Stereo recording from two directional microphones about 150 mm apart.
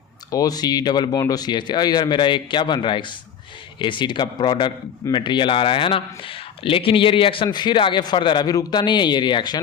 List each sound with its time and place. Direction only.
0.3 s a man's voice: 25° left (ahead or behind)